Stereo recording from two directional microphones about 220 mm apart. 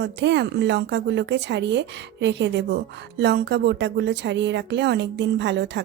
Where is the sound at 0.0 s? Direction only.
55° right (ahead or behind).